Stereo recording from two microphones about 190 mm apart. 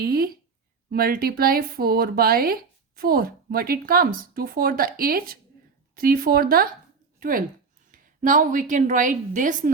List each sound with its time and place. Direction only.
0.0 s a woman's voice: 50° right (ahead or behind)